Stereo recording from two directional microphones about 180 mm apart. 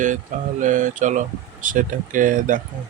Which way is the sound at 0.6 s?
45° right (ahead or behind).